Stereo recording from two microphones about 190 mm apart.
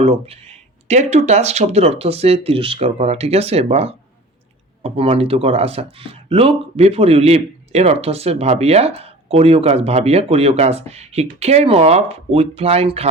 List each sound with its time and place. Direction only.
0.0 s speech: 30° right (ahead or behind)